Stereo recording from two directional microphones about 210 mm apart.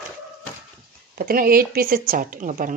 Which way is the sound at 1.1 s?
45° right (ahead or behind).